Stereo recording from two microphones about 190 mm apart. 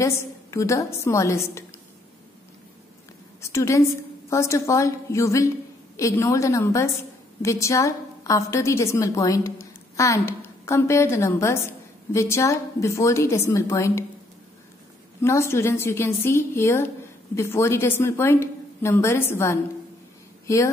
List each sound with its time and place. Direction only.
0.0 s a woman's voice: 15° left (ahead or behind)
3.3 s a woman's voice: 15° left (ahead or behind)
15.2 s a woman's voice: 15° left (ahead or behind)